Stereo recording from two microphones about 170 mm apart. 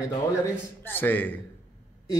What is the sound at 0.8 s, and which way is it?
Speech, 10° left (ahead or behind).